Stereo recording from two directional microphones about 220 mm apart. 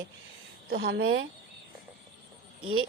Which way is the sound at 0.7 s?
45° right (ahead or behind).